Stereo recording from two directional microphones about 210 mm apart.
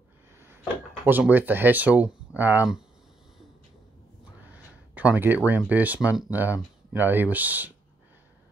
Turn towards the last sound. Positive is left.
turn(degrees=-10)  # may be behind; listen again after turning